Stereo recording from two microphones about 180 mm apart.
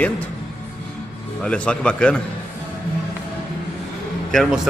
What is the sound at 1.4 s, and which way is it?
Speech, 5° left (ahead or behind).